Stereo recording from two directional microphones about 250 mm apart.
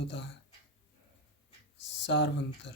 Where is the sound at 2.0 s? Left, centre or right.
Left.